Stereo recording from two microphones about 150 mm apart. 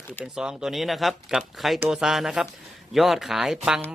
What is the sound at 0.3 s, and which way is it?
Speech, 5° right (ahead or behind).